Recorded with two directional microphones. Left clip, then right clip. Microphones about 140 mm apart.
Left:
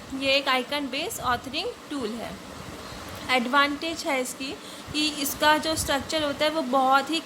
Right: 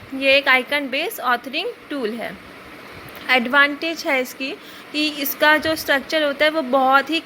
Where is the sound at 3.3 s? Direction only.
35° right (ahead or behind).